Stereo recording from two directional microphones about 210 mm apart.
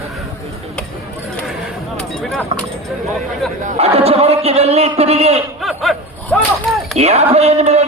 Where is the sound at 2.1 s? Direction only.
Centre (ahead or behind).